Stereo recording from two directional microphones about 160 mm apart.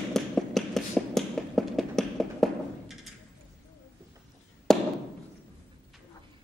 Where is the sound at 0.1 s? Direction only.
Centre (ahead or behind).